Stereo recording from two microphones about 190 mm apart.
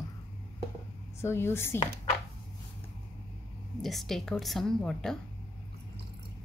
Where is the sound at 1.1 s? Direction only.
15° left (ahead or behind).